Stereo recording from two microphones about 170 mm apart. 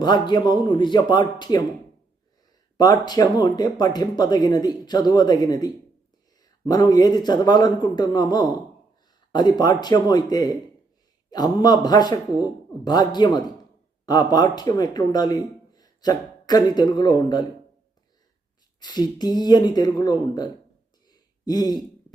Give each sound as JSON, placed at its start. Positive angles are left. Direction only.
{"t": 0.0, "sound": "speech", "side_deg": 25}
{"t": 2.7, "sound": "a man's voice", "side_deg": 25}
{"t": 18.8, "sound": "speech", "side_deg": 25}
{"t": 21.1, "sound": "a sound", "side_deg": 25}